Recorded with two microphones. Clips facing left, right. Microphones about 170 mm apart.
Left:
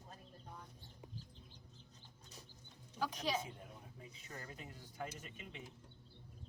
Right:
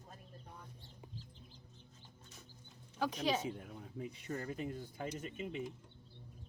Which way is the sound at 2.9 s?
65° right (ahead or behind).